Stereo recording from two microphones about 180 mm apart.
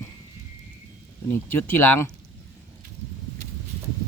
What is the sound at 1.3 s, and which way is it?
Speech, 10° left (ahead or behind).